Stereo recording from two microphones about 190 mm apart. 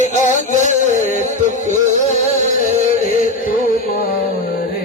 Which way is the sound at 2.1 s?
35° right (ahead or behind).